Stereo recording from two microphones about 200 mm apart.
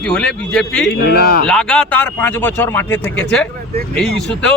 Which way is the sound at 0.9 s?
50° left (ahead or behind).